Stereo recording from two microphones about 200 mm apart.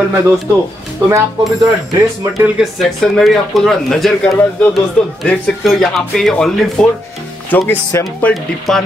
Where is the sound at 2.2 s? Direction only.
15° right (ahead or behind).